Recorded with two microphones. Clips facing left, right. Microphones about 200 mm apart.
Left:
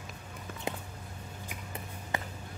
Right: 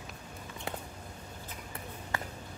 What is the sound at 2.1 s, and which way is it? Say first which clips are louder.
Music: left 2 dB; 20° left (ahead or behind).